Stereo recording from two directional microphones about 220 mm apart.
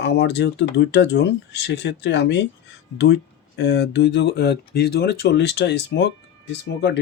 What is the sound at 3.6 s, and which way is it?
Speech, 50° left (ahead or behind).